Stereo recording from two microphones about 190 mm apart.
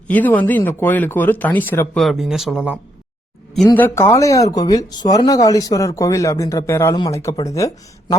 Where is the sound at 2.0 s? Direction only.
Centre (ahead or behind).